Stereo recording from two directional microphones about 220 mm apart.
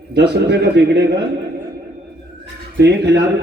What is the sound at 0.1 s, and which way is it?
A man's voice, 50° right (ahead or behind).